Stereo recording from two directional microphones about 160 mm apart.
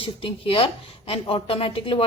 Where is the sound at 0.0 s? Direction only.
35° left (ahead or behind).